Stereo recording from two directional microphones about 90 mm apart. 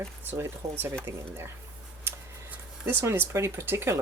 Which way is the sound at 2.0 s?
25° right (ahead or behind).